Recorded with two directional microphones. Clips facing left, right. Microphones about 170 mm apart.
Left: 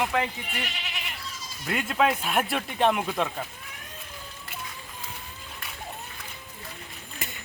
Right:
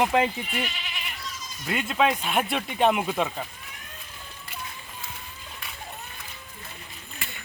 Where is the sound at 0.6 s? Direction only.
80° left.